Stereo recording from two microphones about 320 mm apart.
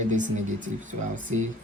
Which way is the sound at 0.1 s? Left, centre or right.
Right.